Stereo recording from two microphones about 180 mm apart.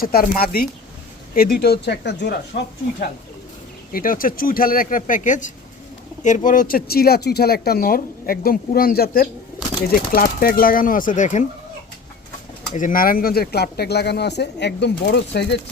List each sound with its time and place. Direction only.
0.0 s speech: 55° left (ahead or behind)
3.9 s speech: 50° left (ahead or behind)
12.7 s speech: 50° left (ahead or behind); by 15.5 s 70° left (ahead or behind)